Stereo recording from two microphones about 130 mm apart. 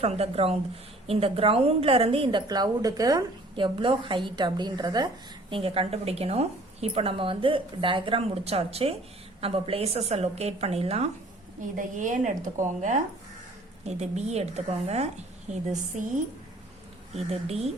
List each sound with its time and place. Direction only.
0.0 s a woman's voice: 50° right (ahead or behind)
2.5 s a woman's voice: 30° right (ahead or behind)
3.8 s a woman's voice: 40° right (ahead or behind)
5.5 s a woman's voice: 45° right (ahead or behind)
11.8 s a woman's voice: 80° right
13.8 s a woman's voice: 60° right (ahead or behind)
17.2 s a woman's voice: 50° right (ahead or behind)